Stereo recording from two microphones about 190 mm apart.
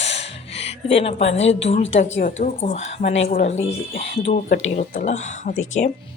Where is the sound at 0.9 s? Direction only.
30° left (ahead or behind).